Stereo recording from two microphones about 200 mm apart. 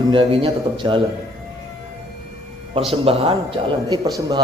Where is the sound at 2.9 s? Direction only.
30° right (ahead or behind).